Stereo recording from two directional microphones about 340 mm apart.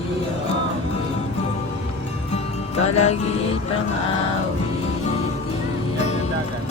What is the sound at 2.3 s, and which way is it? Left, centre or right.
Music, centre.